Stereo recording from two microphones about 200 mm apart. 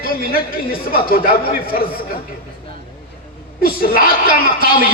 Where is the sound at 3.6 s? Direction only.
45° left (ahead or behind).